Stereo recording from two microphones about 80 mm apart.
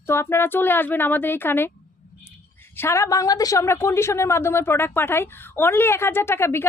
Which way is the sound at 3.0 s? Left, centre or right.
Left.